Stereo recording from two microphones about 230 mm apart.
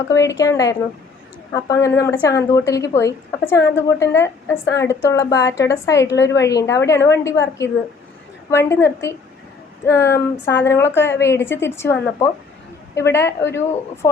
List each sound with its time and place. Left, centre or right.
0.1 s speech: centre
8.4 s speech: centre